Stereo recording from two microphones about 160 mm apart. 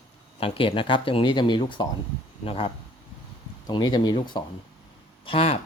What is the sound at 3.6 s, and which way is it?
Speech, 25° left (ahead or behind).